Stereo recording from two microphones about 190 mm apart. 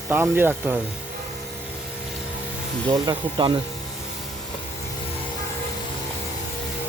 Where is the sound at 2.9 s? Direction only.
25° right (ahead or behind).